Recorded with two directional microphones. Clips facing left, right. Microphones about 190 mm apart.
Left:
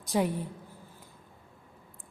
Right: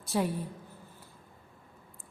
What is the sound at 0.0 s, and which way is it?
Speech, 15° left (ahead or behind).